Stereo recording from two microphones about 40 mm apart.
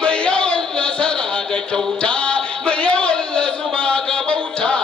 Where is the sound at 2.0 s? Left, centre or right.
Left.